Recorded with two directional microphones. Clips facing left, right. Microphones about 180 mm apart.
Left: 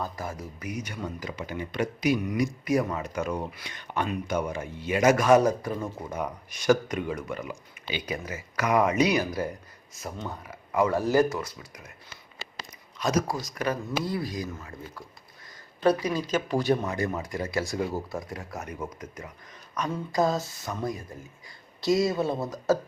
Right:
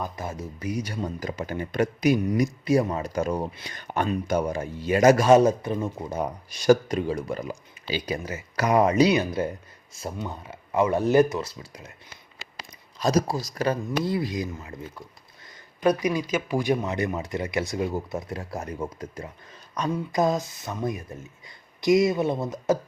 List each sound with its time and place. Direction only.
0.0 s speech: 25° right (ahead or behind); by 2.1 s 45° right (ahead or behind)
2.3 s speech: 30° right (ahead or behind)
13.0 s speech: 35° right (ahead or behind)
20.1 s speech: 20° right (ahead or behind)